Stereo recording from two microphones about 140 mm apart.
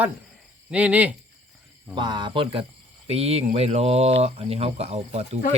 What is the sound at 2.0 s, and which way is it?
Speech, 35° right (ahead or behind).